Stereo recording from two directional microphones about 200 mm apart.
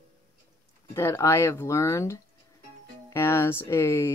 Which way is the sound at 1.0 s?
15° left (ahead or behind).